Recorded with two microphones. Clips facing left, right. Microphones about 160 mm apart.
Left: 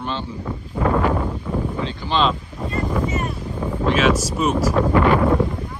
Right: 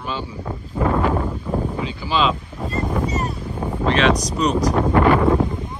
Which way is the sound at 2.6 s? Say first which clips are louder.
Even; 40° right (ahead or behind).